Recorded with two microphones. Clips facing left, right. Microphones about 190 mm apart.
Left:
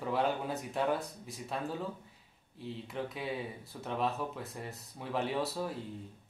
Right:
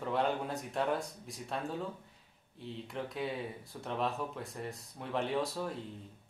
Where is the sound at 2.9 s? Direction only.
Centre (ahead or behind).